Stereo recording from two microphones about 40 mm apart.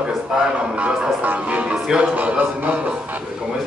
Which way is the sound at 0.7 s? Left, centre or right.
Right.